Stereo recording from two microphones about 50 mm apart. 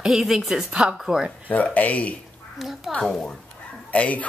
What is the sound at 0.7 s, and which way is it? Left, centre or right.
Speech, right.